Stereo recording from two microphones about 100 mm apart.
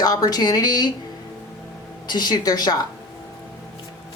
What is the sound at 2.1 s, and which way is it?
Speech, 45° left (ahead or behind).